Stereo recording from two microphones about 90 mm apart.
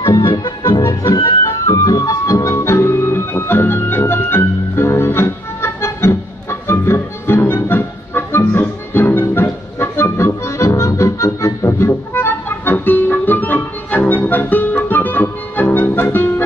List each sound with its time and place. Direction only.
0.0 s music: 55° left (ahead or behind); by 16.4 s 25° left (ahead or behind)